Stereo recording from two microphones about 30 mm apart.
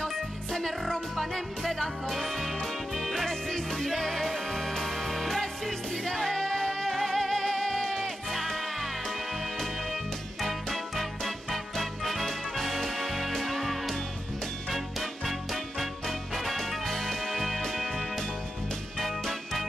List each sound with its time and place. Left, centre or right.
0.0 s music: centre
3.3 s music: centre
6.9 s music: centre
7.2 s music: centre
8.3 s music: centre
10.4 s music: centre